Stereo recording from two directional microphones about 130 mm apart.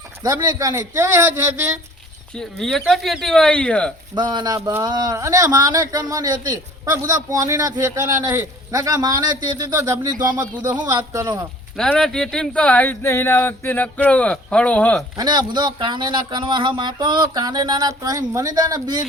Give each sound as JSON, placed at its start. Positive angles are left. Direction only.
{"t": 0.2, "sound": "a man's voice", "side_deg": -30}
{"t": 2.3, "sound": "speech", "side_deg": 5}
{"t": 4.1, "sound": "a man's voice", "side_deg": -35}
{"t": 10.6, "sound": "a man's voice", "side_deg": -15}
{"t": 11.8, "sound": "speech", "side_deg": 5}
{"t": 15.1, "sound": "speech", "side_deg": -35}